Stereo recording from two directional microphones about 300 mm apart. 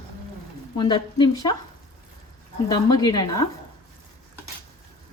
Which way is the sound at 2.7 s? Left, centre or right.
Centre.